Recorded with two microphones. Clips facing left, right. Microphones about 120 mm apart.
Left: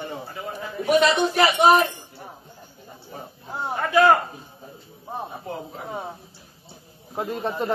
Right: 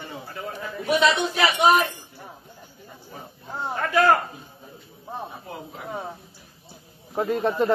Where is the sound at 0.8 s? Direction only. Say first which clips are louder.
Left 2 dB; 45° left (ahead or behind).